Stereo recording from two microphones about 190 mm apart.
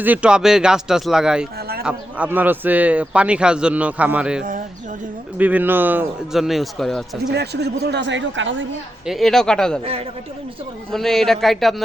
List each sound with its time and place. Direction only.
0.0 s a man's voice: 5° right (ahead or behind)
7.3 s speech: 60° right (ahead or behind); by 8.6 s 80° right
9.0 s speech: centre (ahead or behind)
9.8 s a man's voice: 30° right (ahead or behind)
10.9 s speech: centre (ahead or behind)